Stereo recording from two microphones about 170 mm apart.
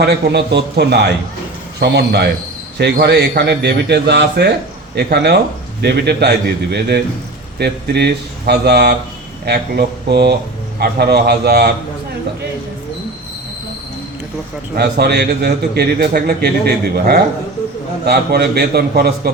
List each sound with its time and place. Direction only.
0.0 s a man's voice: 75° right (ahead or behind)
14.8 s a man's voice: 70° right (ahead or behind)